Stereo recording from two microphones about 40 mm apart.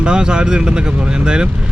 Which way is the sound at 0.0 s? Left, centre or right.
Right.